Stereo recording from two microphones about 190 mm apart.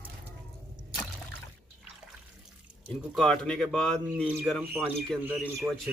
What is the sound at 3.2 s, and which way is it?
A man's voice, centre (ahead or behind).